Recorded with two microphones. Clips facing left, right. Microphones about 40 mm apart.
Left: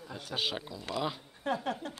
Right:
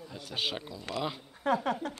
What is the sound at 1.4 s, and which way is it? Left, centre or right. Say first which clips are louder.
Speech: right 5 dB; right.